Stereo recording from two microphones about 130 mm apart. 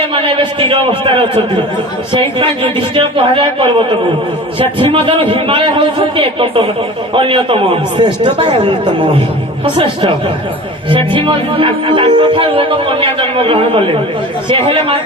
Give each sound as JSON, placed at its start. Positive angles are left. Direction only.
{"t": 0.0, "sound": "speech", "side_deg": -45}